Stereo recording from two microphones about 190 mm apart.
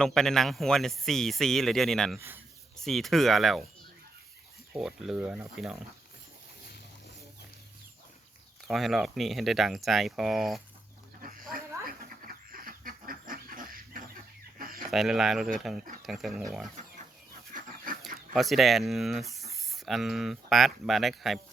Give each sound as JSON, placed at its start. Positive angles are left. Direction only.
{"t": 0.0, "sound": "speech", "side_deg": 0}
{"t": 2.1, "sound": "speech", "side_deg": -10}
{"t": 2.7, "sound": "speech", "side_deg": 0}
{"t": 4.8, "sound": "speech", "side_deg": 0}
{"t": 8.6, "sound": "speech", "side_deg": 0}
{"t": 11.2, "sound": "pig", "side_deg": -50}
{"t": 11.5, "sound": "duck", "side_deg": -50}
{"t": 14.8, "sound": "speech", "side_deg": 0}
{"t": 18.3, "sound": "speech", "side_deg": 0}